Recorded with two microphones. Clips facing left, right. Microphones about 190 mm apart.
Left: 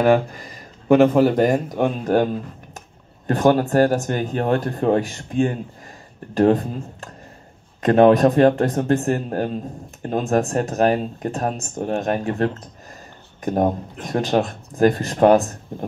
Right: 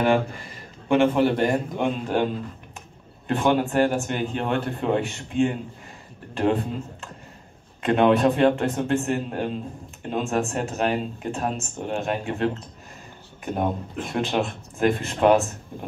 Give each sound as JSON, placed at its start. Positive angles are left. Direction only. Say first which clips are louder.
{"t": 0.8, "sound": "speech", "louder": "left 5 dB", "side_deg": 40}
{"t": 3.3, "sound": "speech", "louder": "left 5 dB", "side_deg": 40}